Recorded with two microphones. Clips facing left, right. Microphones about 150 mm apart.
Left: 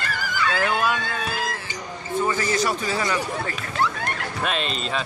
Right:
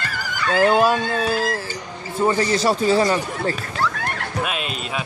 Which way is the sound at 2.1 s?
30° right (ahead or behind).